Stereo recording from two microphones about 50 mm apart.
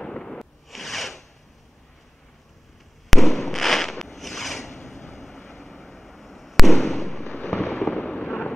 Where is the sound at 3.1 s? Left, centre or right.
Centre.